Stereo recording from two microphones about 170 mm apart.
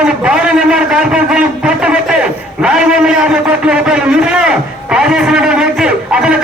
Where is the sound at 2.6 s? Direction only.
5° right (ahead or behind).